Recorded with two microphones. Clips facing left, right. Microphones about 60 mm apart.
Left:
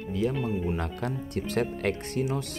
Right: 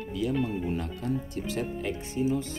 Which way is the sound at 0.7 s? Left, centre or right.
Left.